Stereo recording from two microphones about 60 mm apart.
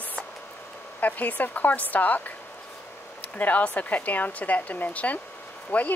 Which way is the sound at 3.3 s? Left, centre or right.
Left.